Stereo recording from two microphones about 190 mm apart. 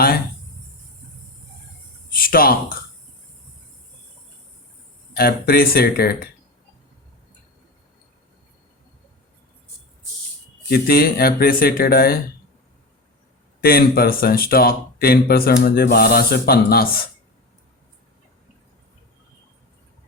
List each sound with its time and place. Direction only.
2.0 s a sound: 50° left (ahead or behind)
5.1 s speech: 50° left (ahead or behind)
10.7 s speech: 50° left (ahead or behind)
13.6 s speech: 50° left (ahead or behind)